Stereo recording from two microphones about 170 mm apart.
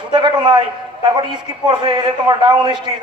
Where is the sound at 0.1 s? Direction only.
25° right (ahead or behind).